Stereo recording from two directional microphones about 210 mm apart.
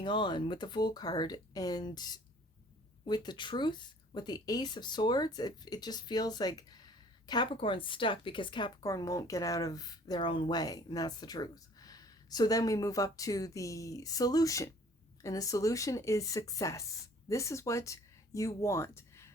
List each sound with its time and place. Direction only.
0.0 s speech: 25° left (ahead or behind)